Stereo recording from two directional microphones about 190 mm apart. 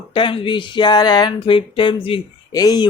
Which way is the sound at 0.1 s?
25° left (ahead or behind).